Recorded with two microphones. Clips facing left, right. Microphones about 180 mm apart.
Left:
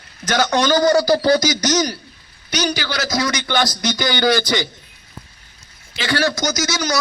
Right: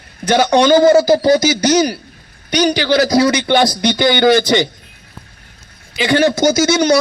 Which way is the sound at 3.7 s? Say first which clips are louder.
Right 6 dB; 60° right (ahead or behind).